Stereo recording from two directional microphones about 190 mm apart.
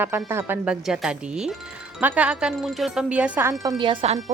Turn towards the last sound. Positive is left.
turn(degrees=-30)  # may be behind; listen again after turning